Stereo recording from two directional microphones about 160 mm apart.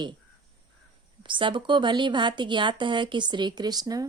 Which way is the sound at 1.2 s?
30° right (ahead or behind).